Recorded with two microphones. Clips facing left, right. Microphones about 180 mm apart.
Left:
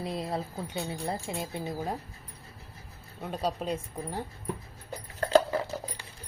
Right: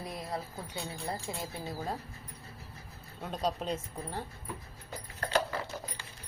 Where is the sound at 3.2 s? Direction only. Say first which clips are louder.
Left 2 dB; 5° left (ahead or behind).